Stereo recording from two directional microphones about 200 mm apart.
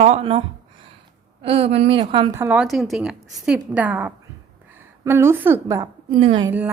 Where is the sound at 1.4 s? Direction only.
30° right (ahead or behind).